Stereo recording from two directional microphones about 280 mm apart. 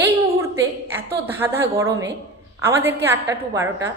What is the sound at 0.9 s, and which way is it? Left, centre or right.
A woman's voice, centre.